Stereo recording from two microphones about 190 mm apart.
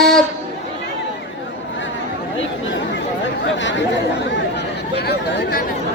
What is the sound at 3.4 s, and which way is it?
Chatter, 75° left (ahead or behind).